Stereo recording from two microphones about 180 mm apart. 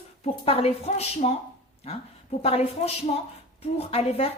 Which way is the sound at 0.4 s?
35° left (ahead or behind).